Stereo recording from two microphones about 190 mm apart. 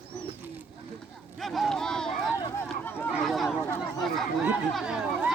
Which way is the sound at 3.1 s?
Centre (ahead or behind).